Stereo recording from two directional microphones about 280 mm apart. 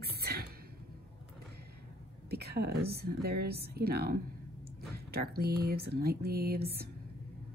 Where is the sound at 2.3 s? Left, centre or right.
Right.